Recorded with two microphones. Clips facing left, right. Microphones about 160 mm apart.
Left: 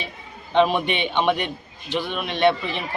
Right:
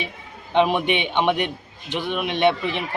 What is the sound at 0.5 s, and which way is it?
Speech, 15° right (ahead or behind).